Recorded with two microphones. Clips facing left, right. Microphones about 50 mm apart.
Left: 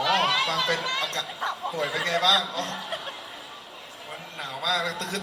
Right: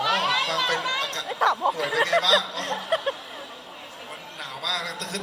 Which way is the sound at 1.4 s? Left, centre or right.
Right.